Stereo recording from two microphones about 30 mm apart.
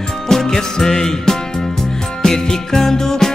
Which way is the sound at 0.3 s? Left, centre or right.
Centre.